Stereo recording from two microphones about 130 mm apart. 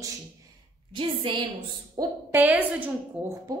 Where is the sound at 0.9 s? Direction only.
40° right (ahead or behind).